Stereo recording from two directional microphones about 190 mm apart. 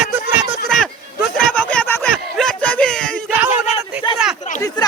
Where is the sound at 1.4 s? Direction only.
5° left (ahead or behind).